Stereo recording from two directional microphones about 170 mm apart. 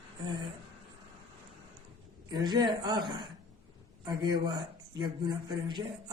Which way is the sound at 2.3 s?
25° right (ahead or behind).